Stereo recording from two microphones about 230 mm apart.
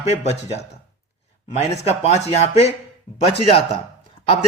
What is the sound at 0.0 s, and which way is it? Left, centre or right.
A man's voice, left.